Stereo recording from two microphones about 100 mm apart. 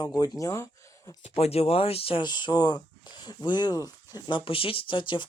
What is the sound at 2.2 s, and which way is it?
Speech, 45° left (ahead or behind).